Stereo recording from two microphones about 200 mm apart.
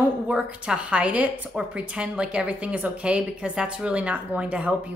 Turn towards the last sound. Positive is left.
turn(degrees=-5)  # may be behind; listen again after turning